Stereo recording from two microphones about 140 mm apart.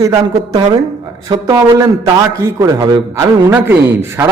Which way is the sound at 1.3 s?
30° right (ahead or behind).